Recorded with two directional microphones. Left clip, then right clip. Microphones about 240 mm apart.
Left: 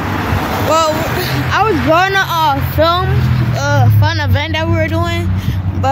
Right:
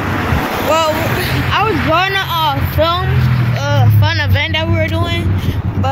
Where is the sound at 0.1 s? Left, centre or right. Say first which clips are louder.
Even; left.